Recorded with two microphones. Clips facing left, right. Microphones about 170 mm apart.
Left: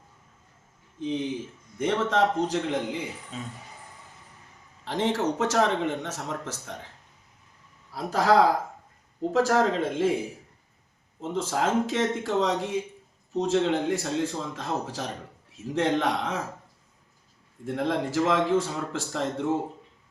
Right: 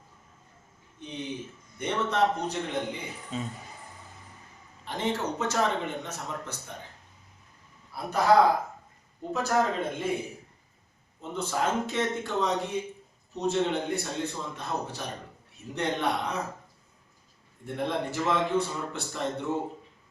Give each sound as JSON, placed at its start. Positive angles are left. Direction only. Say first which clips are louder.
{"t": 0.9, "sound": "speech", "louder": "left 7 dB", "side_deg": 90}
{"t": 3.3, "sound": "speech", "louder": "right 8 dB", "side_deg": 0}
{"t": 4.9, "sound": "speech", "louder": "left 4 dB", "side_deg": 90}
{"t": 7.9, "sound": "speech", "louder": "left 2 dB", "side_deg": 90}
{"t": 9.3, "sound": "speech", "louder": "left 4 dB", "side_deg": 90}
{"t": 11.2, "sound": "speech", "louder": "left 3 dB", "side_deg": 90}
{"t": 17.7, "sound": "speech", "louder": "left 3 dB", "side_deg": 90}